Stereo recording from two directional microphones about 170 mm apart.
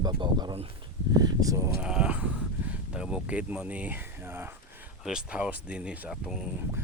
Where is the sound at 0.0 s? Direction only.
25° right (ahead or behind).